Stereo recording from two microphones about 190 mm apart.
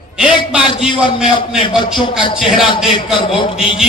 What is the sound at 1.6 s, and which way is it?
Speech, 25° left (ahead or behind).